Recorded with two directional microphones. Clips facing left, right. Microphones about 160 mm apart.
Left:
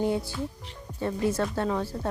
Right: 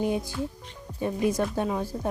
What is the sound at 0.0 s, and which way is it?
Speech, 15° right (ahead or behind).